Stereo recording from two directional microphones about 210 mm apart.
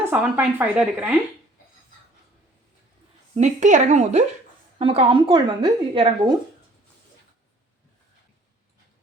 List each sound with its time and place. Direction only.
0.0 s speech: 10° right (ahead or behind)
3.3 s a woman's voice: 35° right (ahead or behind)